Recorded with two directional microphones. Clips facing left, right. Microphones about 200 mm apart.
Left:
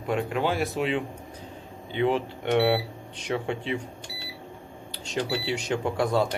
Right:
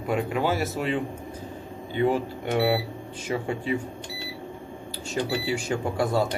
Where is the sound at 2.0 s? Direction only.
5° right (ahead or behind).